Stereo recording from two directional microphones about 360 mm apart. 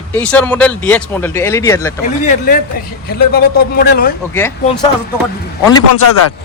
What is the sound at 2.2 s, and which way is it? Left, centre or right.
A man's voice, left.